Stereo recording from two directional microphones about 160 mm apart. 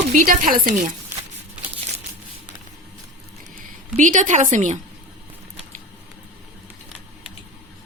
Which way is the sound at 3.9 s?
55° right (ahead or behind).